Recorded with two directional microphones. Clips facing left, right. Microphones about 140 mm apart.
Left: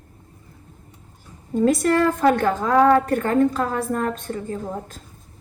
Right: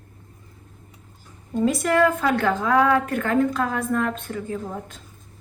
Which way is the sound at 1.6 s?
45° left (ahead or behind).